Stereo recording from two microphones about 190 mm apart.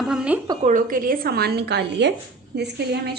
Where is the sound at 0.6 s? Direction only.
45° right (ahead or behind).